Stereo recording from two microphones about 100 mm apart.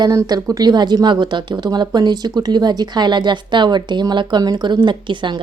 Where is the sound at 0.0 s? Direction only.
40° right (ahead or behind).